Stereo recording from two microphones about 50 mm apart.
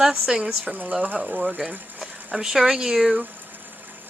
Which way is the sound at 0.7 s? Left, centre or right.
Right.